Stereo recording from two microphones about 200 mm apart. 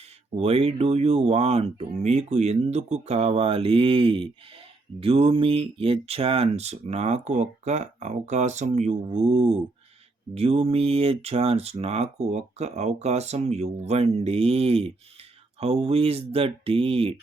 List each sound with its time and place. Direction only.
0.3 s speech: 30° right (ahead or behind)